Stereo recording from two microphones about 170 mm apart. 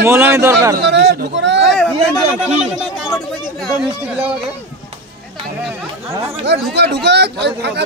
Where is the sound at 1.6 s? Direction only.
Centre (ahead or behind).